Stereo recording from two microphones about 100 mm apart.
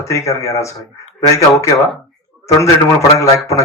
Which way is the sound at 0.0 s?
30° left (ahead or behind).